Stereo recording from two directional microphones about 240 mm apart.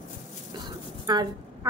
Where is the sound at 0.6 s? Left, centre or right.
Centre.